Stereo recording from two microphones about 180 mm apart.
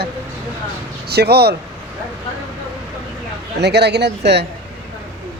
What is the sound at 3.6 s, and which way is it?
Speech, 65° right (ahead or behind).